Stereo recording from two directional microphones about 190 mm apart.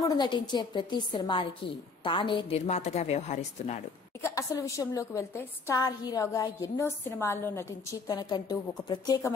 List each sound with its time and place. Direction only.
0.0 s a woman's voice: 20° left (ahead or behind)
4.2 s a woman's voice: 15° left (ahead or behind)